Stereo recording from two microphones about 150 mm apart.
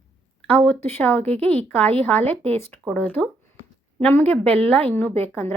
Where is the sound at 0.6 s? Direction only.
15° left (ahead or behind).